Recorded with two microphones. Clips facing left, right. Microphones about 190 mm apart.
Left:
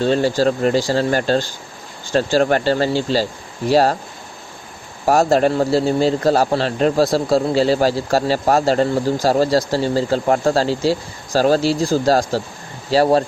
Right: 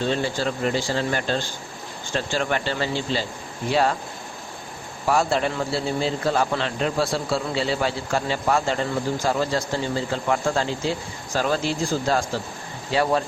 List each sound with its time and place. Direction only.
0.0 s speech: 40° left (ahead or behind)
5.0 s speech: 40° left (ahead or behind)